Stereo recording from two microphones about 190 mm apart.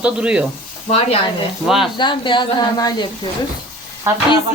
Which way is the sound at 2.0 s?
25° left (ahead or behind).